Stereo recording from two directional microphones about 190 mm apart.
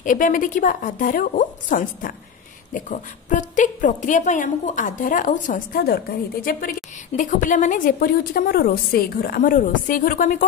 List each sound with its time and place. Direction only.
0.0 s a woman's voice: 45° left (ahead or behind)
7.1 s a woman's voice: 40° left (ahead or behind)